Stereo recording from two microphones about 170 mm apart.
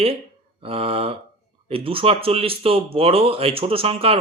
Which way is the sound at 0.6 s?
35° right (ahead or behind).